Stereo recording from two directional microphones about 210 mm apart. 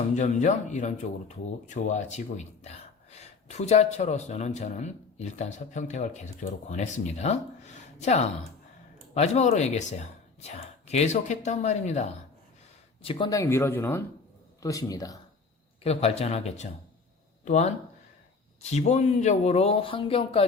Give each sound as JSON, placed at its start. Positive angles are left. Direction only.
{"t": 0.2, "sound": "speech", "side_deg": 35}
{"t": 15.8, "sound": "speech", "side_deg": 30}